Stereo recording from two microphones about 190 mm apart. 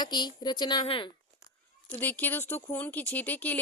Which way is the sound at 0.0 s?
25° left (ahead or behind).